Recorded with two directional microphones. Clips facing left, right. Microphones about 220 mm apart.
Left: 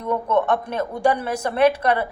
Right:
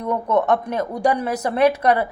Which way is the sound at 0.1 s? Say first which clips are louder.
Right 1 dB; 20° right (ahead or behind).